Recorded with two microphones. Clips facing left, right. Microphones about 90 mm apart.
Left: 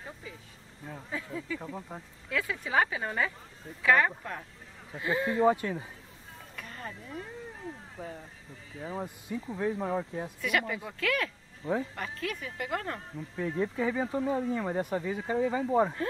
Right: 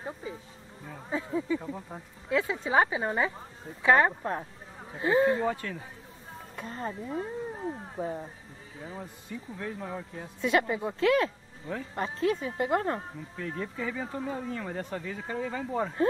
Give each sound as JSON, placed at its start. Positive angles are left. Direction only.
{"t": 0.0, "sound": "insect", "side_deg": -30}
{"t": 1.1, "sound": "speech", "side_deg": -25}
{"t": 1.8, "sound": "speech", "side_deg": 0}
{"t": 2.2, "sound": "speech", "side_deg": -25}
{"t": 5.4, "sound": "speech", "side_deg": 20}
{"t": 6.5, "sound": "speech", "side_deg": -30}
{"t": 9.0, "sound": "speech", "side_deg": 20}
{"t": 10.4, "sound": "speech", "side_deg": -25}
{"t": 13.4, "sound": "speech", "side_deg": 15}